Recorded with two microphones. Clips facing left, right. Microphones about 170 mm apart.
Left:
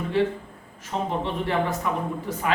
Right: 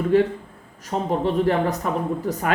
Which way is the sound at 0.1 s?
45° right (ahead or behind).